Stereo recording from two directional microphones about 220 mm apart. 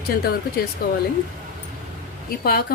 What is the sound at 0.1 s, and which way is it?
Speech, 40° left (ahead or behind).